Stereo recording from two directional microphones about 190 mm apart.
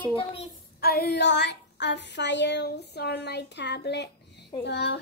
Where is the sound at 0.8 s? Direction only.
55° left (ahead or behind).